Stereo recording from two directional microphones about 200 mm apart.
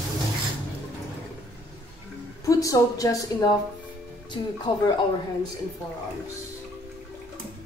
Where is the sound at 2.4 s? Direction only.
15° left (ahead or behind).